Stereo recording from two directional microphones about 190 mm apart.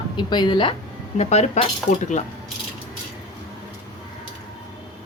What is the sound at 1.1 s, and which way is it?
A woman's voice, 35° left (ahead or behind).